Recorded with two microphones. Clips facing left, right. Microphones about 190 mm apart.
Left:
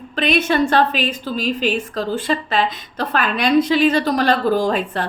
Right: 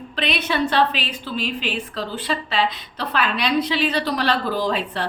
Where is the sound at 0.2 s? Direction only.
45° left (ahead or behind).